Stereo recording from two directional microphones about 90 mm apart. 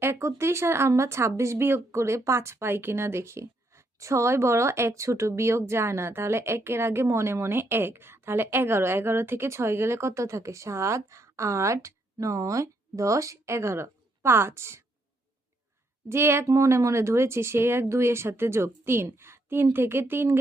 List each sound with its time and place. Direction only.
0.0 s a woman's voice: 30° right (ahead or behind)
16.0 s a woman's voice: 30° right (ahead or behind)